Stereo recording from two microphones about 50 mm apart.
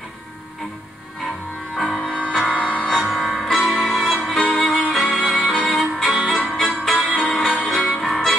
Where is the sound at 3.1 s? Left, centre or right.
Centre.